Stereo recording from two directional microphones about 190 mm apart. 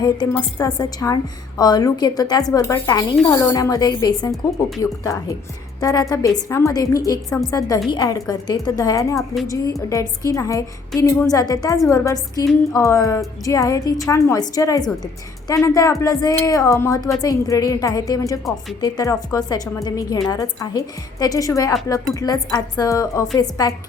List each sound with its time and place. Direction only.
0.6 s a woman's voice: 20° left (ahead or behind)
9.1 s a woman's voice: centre (ahead or behind)
9.9 s a woman's voice: 15° left (ahead or behind)